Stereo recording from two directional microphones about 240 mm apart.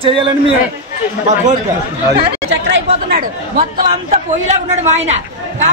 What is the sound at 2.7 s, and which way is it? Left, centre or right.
Speech, right.